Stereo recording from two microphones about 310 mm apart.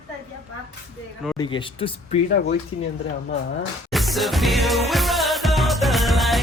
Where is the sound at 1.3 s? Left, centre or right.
Centre.